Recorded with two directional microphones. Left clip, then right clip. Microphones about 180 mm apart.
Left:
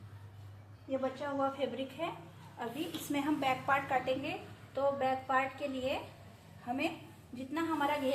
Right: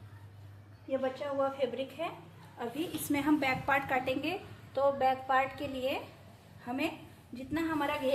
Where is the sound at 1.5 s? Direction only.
45° right (ahead or behind).